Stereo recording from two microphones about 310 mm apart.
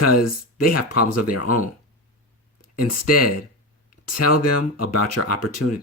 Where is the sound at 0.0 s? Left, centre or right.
Left.